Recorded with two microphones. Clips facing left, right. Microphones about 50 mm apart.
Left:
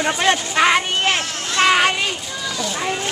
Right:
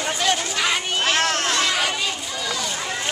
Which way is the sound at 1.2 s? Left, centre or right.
Right.